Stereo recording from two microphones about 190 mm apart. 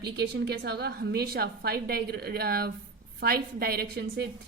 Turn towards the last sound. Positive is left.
turn(degrees=-60)  # may be behind; listen again after turning